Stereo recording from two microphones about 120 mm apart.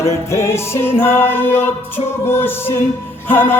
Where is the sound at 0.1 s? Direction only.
25° left (ahead or behind).